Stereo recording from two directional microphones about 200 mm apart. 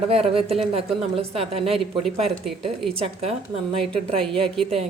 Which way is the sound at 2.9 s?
30° right (ahead or behind).